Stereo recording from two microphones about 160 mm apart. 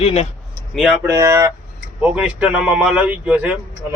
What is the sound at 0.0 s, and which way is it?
Speech, 40° left (ahead or behind).